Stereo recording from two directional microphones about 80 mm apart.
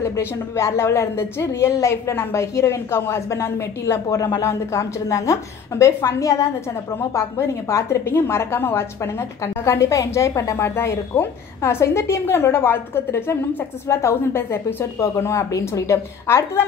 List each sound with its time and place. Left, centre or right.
0.0 s a woman's voice: left